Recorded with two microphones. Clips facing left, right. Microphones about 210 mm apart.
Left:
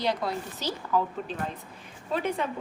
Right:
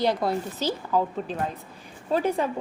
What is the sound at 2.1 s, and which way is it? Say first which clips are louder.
Speech: right 5 dB; 35° right (ahead or behind).